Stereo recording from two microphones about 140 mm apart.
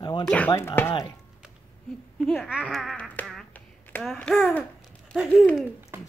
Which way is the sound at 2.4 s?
Centre (ahead or behind).